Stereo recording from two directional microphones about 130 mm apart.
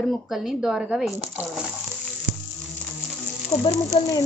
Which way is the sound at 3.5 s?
30° left (ahead or behind).